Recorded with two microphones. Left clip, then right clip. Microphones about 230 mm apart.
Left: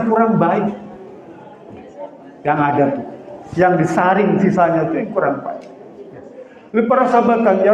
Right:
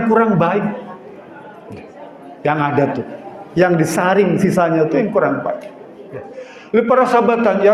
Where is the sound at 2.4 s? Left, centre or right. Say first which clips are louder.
Left 1 dB; right.